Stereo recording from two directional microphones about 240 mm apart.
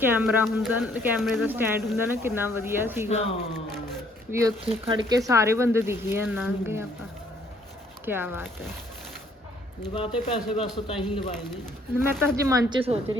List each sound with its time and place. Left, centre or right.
0.0 s speech: centre
3.1 s speech: left
4.3 s speech: centre
4.6 s speech: right
8.0 s speech: centre
9.8 s speech: left
12.4 s speech: centre